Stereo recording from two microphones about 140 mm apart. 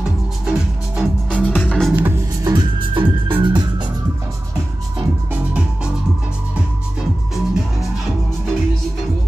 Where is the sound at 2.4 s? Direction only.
30° right (ahead or behind).